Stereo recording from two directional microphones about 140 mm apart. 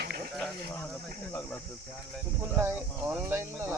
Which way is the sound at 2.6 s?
15° right (ahead or behind).